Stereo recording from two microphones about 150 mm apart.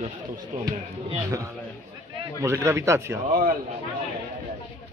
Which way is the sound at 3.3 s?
70° right (ahead or behind).